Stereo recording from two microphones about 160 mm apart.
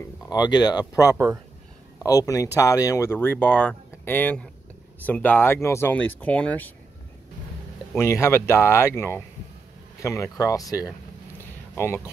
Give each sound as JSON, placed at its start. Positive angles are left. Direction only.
{"t": 0.3, "sound": "speech", "side_deg": 25}
{"t": 1.1, "sound": "speech", "side_deg": -15}
{"t": 2.0, "sound": "speech", "side_deg": 20}
{"t": 8.0, "sound": "speech", "side_deg": 15}